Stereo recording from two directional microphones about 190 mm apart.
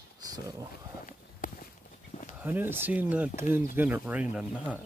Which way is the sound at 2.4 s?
10° right (ahead or behind).